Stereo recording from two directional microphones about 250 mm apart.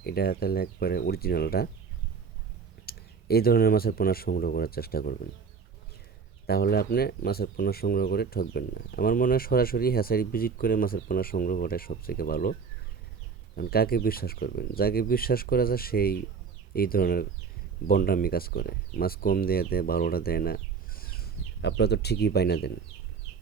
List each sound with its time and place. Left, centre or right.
0.0 s speech: left
2.8 s speech: left
6.5 s speech: left
13.6 s speech: left